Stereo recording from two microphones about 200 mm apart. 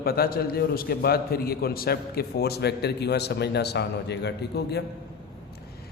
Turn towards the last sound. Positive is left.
turn(degrees=55)  # may be behind; listen again after turning